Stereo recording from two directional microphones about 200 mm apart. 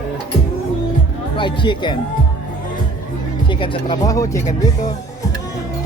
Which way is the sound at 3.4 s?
25° left (ahead or behind).